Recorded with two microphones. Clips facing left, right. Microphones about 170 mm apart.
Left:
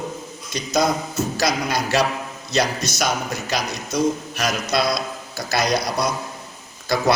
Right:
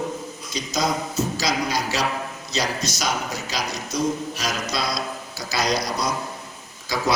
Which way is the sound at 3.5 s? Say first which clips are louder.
Left 3 dB; 60° left (ahead or behind).